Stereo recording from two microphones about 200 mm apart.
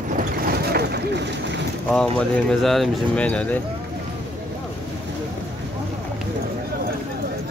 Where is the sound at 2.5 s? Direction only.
Centre (ahead or behind).